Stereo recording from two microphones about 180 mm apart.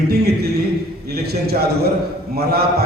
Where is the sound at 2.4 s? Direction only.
60° right (ahead or behind).